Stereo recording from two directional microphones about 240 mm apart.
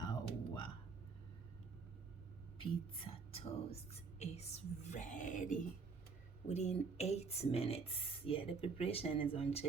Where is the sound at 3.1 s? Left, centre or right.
Left.